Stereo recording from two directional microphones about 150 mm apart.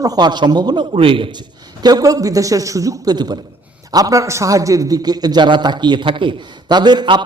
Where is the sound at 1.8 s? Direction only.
25° right (ahead or behind).